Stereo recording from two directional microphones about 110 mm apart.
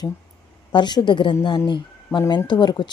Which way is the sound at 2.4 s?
40° left (ahead or behind).